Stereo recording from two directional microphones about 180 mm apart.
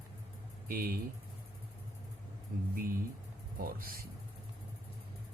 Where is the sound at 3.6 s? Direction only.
55° right (ahead or behind).